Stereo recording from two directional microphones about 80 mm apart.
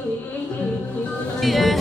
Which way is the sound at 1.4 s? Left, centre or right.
Centre.